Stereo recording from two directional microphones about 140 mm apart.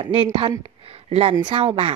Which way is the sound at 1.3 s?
40° right (ahead or behind).